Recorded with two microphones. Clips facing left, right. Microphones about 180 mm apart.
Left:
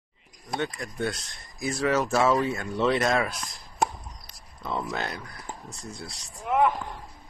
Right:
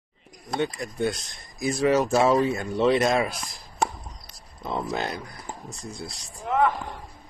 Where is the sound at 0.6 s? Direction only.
15° right (ahead or behind).